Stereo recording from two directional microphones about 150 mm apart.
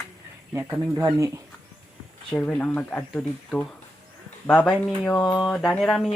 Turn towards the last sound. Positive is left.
turn(degrees=5)  # may be behind; listen again after turning